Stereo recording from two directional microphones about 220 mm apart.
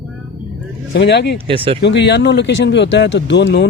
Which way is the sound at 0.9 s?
50° left (ahead or behind).